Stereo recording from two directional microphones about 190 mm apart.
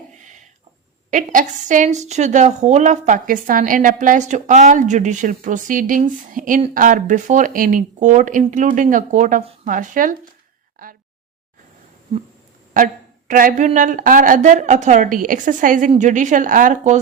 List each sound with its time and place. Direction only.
1.1 s a woman's voice: 40° right (ahead or behind)
10.8 s a sound: 45° right (ahead or behind)
12.7 s a woman's voice: 45° right (ahead or behind)